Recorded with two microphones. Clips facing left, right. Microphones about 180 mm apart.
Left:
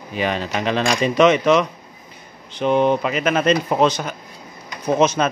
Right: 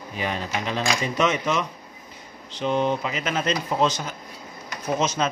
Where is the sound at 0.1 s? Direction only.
80° left.